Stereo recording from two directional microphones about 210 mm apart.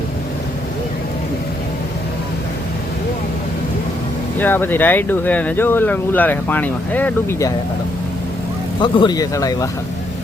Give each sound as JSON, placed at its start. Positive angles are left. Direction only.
{"t": 4.4, "sound": "speech", "side_deg": 10}
{"t": 8.8, "sound": "speech", "side_deg": 20}